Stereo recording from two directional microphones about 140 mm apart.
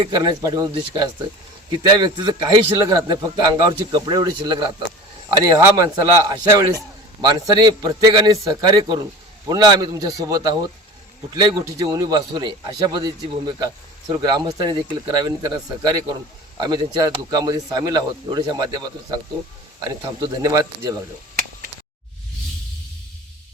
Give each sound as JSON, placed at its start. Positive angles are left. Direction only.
{"t": 0.0, "sound": "a man's voice", "side_deg": -30}